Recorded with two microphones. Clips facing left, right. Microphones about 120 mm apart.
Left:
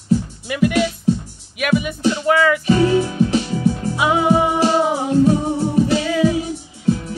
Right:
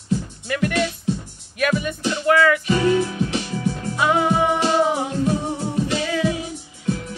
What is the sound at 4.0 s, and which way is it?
Music, 10° left (ahead or behind).